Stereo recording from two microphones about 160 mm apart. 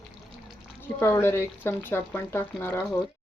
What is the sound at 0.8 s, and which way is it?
Speech, 15° left (ahead or behind).